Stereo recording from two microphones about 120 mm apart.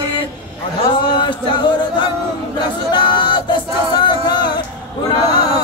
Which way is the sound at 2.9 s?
40° left (ahead or behind).